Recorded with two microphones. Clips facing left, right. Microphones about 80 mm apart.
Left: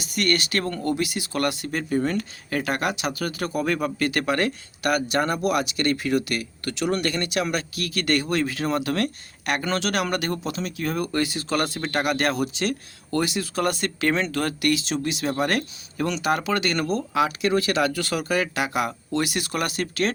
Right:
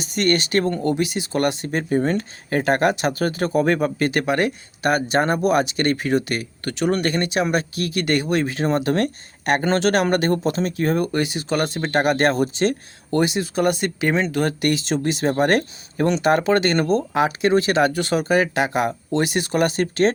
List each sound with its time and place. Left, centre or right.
0.0 s speech: right
11.1 s speech: right
14.6 s speech: right